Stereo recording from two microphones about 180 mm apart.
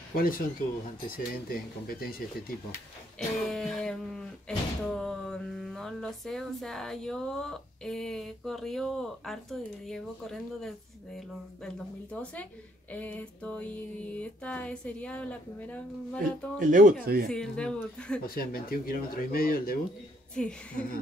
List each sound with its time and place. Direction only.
0.1 s speech: 55° left (ahead or behind)
3.2 s speech: centre (ahead or behind)
12.9 s music: 10° left (ahead or behind)
17.0 s speech: 60° right (ahead or behind)
17.3 s speech: 5° left (ahead or behind)
18.2 s speech: 55° left (ahead or behind)
20.3 s speech: 5° left (ahead or behind)